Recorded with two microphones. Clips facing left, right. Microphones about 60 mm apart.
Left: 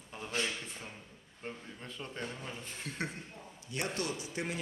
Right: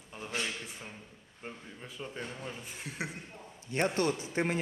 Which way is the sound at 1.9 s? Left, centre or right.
Centre.